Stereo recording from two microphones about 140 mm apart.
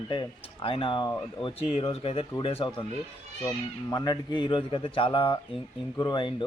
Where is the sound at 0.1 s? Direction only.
35° left (ahead or behind).